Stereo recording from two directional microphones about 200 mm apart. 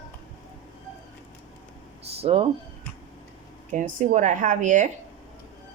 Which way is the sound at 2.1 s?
30° right (ahead or behind).